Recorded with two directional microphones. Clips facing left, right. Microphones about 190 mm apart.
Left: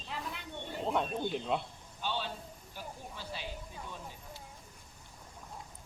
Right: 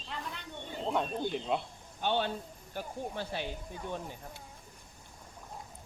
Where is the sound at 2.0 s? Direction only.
55° right (ahead or behind).